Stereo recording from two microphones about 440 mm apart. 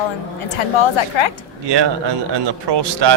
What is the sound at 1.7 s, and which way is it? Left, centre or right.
A man's voice, right.